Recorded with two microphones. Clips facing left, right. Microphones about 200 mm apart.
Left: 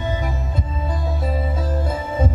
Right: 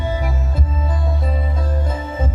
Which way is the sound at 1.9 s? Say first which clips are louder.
Left 2 dB; 10° left (ahead or behind).